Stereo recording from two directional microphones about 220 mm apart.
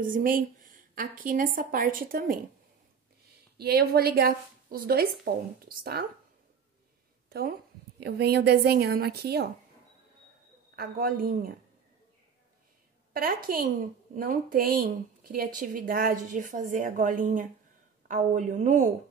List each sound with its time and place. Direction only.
0.0 s a child's voice: 40° right (ahead or behind)
3.5 s a woman's voice: 45° right (ahead or behind)
7.2 s a woman's voice: 45° right (ahead or behind)
10.8 s a child's voice: 40° right (ahead or behind)
13.1 s a woman's voice: 40° right (ahead or behind)